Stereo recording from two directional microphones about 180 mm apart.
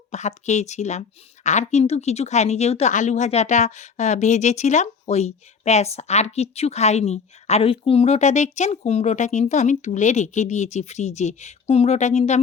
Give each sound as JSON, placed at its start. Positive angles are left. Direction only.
{"t": 0.1, "sound": "speech", "side_deg": 40}